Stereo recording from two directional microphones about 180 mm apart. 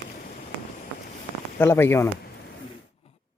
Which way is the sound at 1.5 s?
10° left (ahead or behind).